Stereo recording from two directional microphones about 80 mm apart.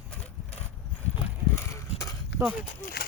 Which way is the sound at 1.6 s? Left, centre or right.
Left.